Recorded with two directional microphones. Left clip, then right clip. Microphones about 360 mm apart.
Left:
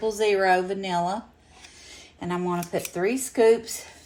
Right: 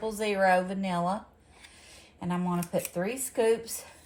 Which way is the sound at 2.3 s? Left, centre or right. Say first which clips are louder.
Left 5 dB; left.